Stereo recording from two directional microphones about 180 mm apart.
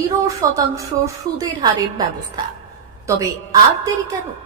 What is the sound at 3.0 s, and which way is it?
Speech, 15° right (ahead or behind).